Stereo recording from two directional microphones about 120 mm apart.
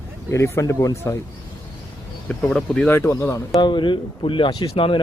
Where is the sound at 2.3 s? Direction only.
5° left (ahead or behind).